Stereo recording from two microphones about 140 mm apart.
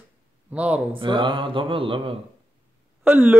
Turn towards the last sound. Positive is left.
turn(degrees=-15)  # may be behind; listen again after turning